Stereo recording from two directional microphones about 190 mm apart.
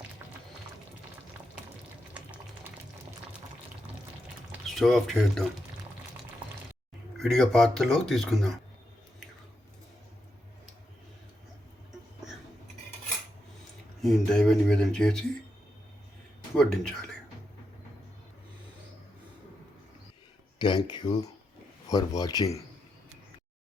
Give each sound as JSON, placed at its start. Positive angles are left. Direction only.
{"t": 2.1, "sound": "a sound", "side_deg": -5}
{"t": 4.5, "sound": "speech", "side_deg": 0}
{"t": 7.2, "sound": "speech", "side_deg": 0}
{"t": 14.0, "sound": "speech", "side_deg": 0}
{"t": 16.6, "sound": "speech", "side_deg": 5}
{"t": 20.6, "sound": "speech", "side_deg": 25}